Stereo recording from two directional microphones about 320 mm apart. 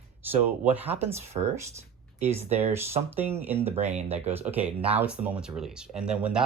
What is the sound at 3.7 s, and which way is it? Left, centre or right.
Speech, centre.